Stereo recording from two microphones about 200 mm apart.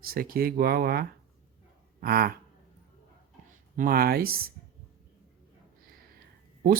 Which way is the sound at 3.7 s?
45° right (ahead or behind).